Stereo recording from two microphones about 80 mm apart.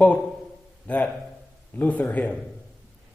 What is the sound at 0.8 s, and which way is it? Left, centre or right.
Speech, centre.